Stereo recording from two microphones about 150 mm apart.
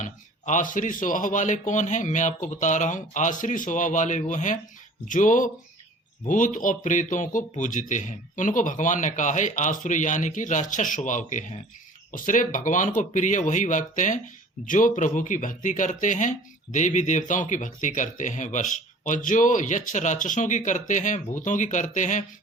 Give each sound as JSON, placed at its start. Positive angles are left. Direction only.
{"t": 0.0, "sound": "speech", "side_deg": 55}